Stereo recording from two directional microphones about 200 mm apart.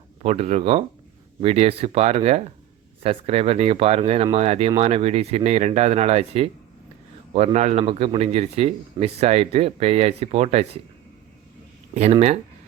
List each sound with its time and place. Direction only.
0.2 s a man's voice: 30° right (ahead or behind)
11.9 s a man's voice: 35° right (ahead or behind)